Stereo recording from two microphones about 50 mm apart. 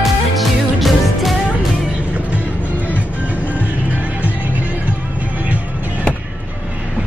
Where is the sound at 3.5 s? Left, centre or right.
Right.